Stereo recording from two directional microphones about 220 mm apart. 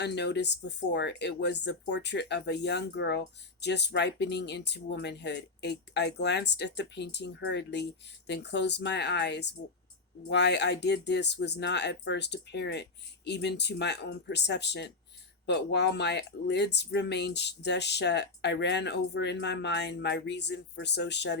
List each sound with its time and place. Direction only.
0.0 s speech: 50° left (ahead or behind)